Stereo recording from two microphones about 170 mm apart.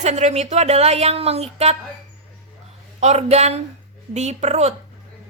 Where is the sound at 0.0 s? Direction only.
40° right (ahead or behind).